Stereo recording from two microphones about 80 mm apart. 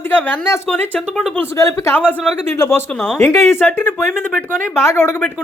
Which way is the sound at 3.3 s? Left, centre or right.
Left.